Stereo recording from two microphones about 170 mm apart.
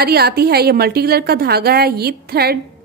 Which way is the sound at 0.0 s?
65° right (ahead or behind).